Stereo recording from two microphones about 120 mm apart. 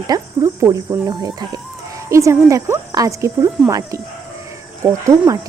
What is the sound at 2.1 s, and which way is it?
Speech, 25° right (ahead or behind).